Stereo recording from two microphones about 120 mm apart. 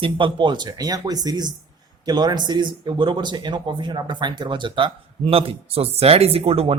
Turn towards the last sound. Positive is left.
turn(degrees=-55)  # may be behind; listen again after turning